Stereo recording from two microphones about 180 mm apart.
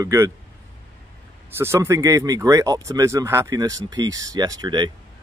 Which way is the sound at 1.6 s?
15° right (ahead or behind).